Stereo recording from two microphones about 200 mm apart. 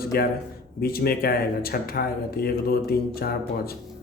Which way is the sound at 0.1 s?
50° left (ahead or behind).